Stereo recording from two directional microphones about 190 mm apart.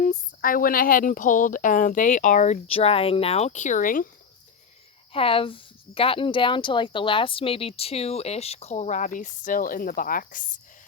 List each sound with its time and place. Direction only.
0.0 s speech: 45° left (ahead or behind)
5.1 s speech: 30° left (ahead or behind); by 10.4 s 50° left (ahead or behind)